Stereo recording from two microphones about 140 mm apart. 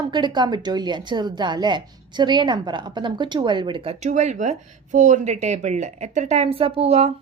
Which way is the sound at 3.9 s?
55° right (ahead or behind).